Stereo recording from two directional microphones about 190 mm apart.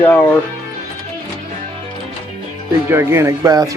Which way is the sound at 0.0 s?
10° left (ahead or behind).